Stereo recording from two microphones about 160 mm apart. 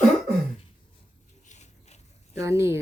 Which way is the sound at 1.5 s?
45° left (ahead or behind).